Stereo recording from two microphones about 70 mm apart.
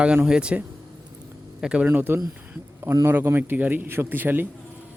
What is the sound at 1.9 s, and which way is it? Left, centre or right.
Speech, right.